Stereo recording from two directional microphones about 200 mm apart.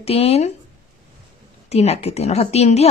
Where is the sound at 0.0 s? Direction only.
30° left (ahead or behind).